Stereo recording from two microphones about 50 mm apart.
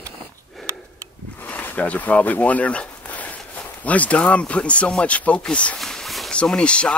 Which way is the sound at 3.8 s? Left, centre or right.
Left.